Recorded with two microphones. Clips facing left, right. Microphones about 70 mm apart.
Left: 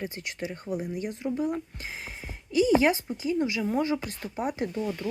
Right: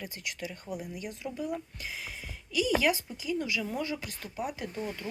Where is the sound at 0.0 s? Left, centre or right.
Left.